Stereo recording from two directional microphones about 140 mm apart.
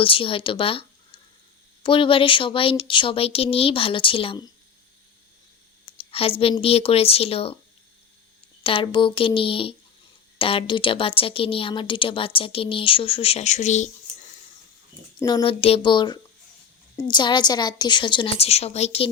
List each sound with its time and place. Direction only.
0.0 s a woman's voice: 40° left (ahead or behind)
6.0 s a woman's voice: 45° left (ahead or behind)
8.6 s a woman's voice: 40° left (ahead or behind); by 13.9 s 55° left (ahead or behind)
15.2 s speech: 30° left (ahead or behind)
15.6 s a woman's voice: 40° left (ahead or behind)